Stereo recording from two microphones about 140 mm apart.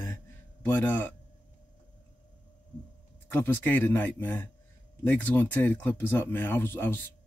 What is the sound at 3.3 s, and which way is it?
Speech, 15° left (ahead or behind).